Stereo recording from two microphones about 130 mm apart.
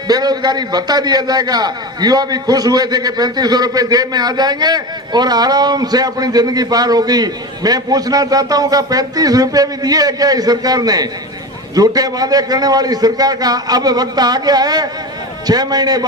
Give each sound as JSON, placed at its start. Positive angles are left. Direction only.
{"t": 0.1, "sound": "a man's voice", "side_deg": -30}